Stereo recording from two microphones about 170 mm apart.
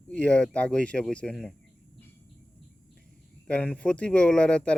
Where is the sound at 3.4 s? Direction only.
5° left (ahead or behind).